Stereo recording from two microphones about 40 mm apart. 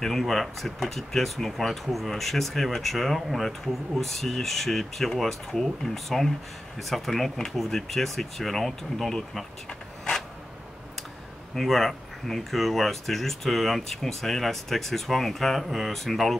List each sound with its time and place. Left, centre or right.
0.0 s speech: centre
11.5 s speech: centre